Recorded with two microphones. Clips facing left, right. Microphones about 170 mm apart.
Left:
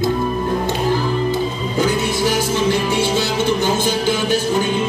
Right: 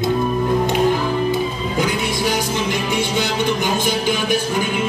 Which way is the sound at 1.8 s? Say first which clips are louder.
Left 3 dB; 15° right (ahead or behind).